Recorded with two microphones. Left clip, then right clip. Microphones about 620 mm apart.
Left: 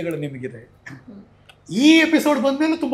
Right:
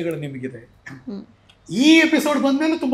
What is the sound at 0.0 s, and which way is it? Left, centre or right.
Speech, centre.